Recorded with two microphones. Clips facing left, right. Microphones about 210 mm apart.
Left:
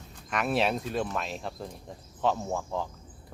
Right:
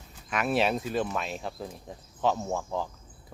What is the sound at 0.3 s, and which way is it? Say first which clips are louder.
Speech: right 1 dB; centre (ahead or behind).